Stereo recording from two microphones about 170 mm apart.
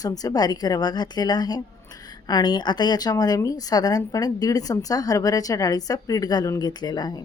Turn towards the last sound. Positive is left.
turn(degrees=25)  # may be behind; listen again after turning